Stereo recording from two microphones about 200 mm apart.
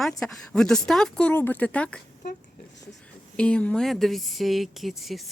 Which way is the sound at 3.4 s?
5° left (ahead or behind).